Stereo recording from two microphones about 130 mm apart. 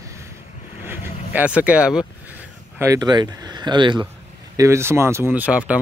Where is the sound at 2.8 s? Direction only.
25° right (ahead or behind).